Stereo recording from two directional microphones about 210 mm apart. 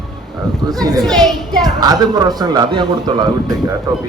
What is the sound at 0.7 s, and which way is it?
A man's voice, 20° right (ahead or behind).